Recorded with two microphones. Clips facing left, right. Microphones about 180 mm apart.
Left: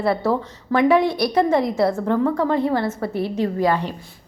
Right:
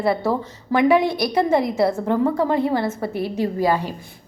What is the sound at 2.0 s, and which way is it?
A woman's voice, 10° right (ahead or behind).